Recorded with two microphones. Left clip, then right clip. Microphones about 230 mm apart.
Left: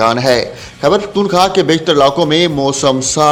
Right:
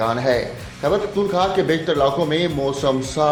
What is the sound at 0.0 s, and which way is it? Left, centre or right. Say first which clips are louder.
A man's voice: left 8 dB; left.